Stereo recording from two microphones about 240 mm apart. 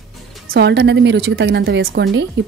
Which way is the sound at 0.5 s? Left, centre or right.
Right.